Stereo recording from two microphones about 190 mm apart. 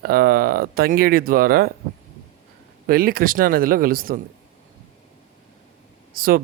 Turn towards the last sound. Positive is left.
turn(degrees=-50)  # may be behind; listen again after turning